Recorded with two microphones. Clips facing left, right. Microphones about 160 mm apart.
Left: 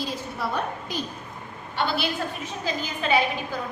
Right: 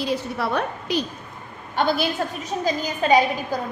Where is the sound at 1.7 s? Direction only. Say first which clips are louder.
Right 5 dB; 45° right (ahead or behind).